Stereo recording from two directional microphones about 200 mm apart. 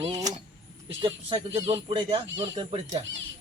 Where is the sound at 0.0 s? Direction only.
20° right (ahead or behind).